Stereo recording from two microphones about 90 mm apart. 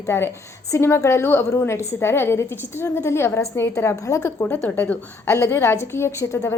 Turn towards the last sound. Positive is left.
turn(degrees=30)  # may be behind; listen again after turning